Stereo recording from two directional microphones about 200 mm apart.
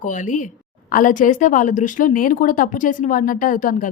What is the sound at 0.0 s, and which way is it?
A woman's voice, 40° left (ahead or behind).